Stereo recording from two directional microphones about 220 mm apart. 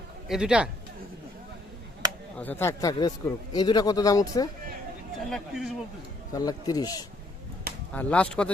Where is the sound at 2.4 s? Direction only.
10° left (ahead or behind).